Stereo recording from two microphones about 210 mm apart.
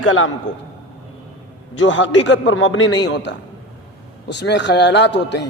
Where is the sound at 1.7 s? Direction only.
60° left (ahead or behind).